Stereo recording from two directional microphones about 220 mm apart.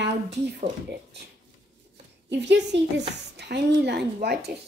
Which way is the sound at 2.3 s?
55° right (ahead or behind).